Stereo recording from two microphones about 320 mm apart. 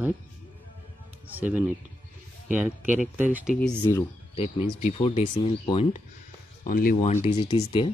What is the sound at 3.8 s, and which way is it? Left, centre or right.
Speech, centre.